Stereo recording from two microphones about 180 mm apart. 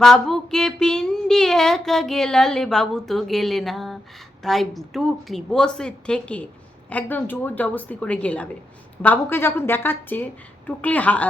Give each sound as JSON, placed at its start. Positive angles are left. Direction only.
{"t": 0.0, "sound": "a woman's voice", "side_deg": 0}